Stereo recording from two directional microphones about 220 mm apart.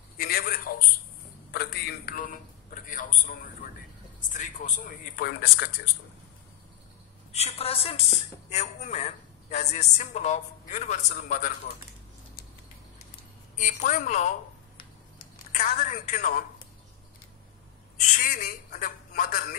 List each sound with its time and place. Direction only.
0.2 s a sound: 40° left (ahead or behind)
1.5 s a man's voice: 45° left (ahead or behind)
7.3 s a woman's voice: 30° left (ahead or behind)
13.6 s a woman's voice: 35° left (ahead or behind)
15.5 s a woman's voice: 35° left (ahead or behind)
17.9 s a woman's voice: 35° left (ahead or behind)